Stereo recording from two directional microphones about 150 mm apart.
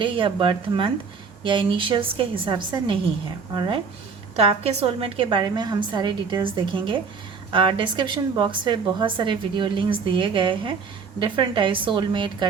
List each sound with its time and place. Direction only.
0.0 s speech: 35° right (ahead or behind)
4.4 s speech: 40° right (ahead or behind)